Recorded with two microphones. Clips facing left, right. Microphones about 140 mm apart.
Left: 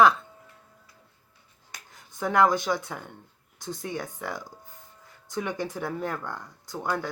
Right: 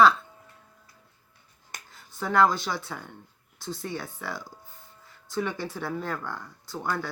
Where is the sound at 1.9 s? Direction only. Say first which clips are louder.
Left 1 dB; 20° left (ahead or behind).